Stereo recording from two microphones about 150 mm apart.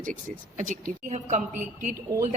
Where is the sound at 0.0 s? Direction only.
55° right (ahead or behind).